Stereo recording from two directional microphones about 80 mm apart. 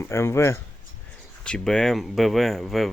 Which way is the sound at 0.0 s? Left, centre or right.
Left.